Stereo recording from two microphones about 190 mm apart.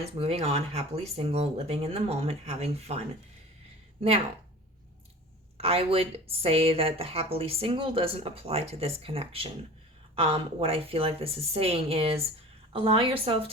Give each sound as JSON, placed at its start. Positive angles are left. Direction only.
{"t": 0.2, "sound": "speech", "side_deg": -35}
{"t": 5.5, "sound": "a woman's voice", "side_deg": -30}